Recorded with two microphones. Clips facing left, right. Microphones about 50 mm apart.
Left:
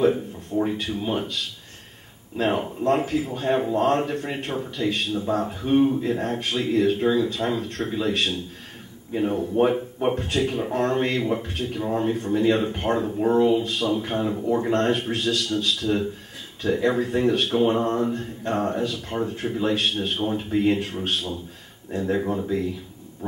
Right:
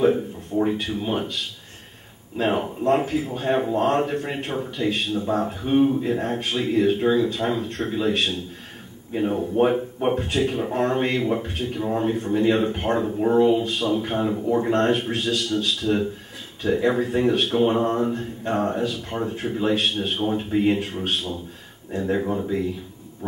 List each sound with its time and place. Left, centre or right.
0.0 s a sound: centre
0.8 s speech: centre
2.3 s speech: centre
9.1 s speech: centre
10.1 s speech: centre
10.4 s speech: centre
15.8 s speech: centre
22.0 s speech: centre